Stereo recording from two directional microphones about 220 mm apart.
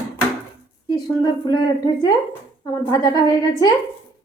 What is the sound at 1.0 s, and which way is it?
A woman's voice, 20° left (ahead or behind).